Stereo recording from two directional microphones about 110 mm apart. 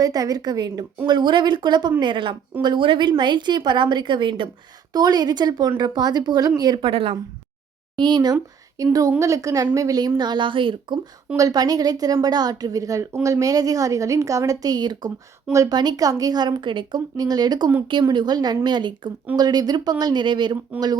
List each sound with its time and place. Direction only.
0.0 s a woman's voice: 35° right (ahead or behind)
6.8 s a woman's voice: 55° right (ahead or behind)
7.9 s a woman's voice: 40° right (ahead or behind)
10.2 s a woman's voice: 45° right (ahead or behind)
11.3 s a woman's voice: 35° right (ahead or behind)